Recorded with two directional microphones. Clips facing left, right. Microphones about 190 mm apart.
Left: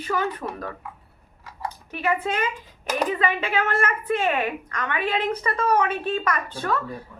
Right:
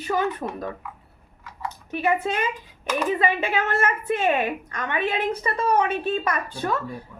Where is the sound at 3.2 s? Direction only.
20° right (ahead or behind).